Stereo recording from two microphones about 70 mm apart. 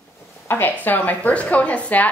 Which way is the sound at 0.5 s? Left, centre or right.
Left.